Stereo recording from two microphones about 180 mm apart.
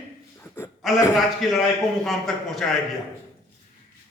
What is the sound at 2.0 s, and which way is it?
Speech, centre (ahead or behind).